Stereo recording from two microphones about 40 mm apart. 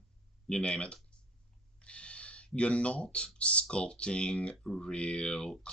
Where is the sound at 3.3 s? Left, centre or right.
Left.